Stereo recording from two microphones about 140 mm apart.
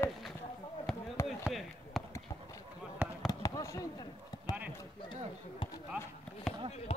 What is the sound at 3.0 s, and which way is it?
Fireworks, 10° right (ahead or behind).